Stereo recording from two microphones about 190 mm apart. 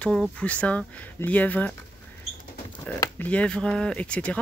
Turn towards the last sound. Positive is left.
turn(degrees=5)  # may be behind; listen again after turning